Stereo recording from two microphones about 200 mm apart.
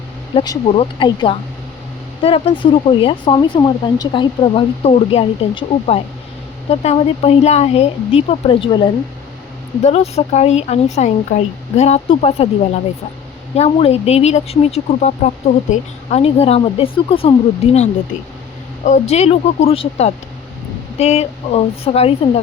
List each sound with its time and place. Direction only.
0.3 s speech: 25° left (ahead or behind)
18.9 s speech: 35° left (ahead or behind)